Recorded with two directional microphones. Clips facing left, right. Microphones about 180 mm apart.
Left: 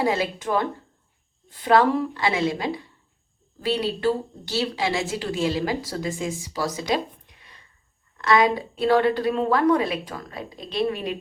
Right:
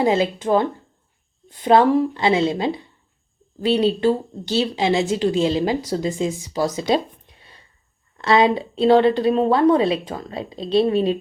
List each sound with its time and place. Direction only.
0.0 s speech: 25° right (ahead or behind)